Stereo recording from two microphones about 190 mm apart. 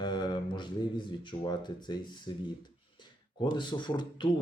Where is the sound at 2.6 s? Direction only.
25° left (ahead or behind).